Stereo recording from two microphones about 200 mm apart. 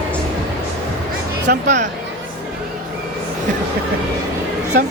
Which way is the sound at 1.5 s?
50° right (ahead or behind).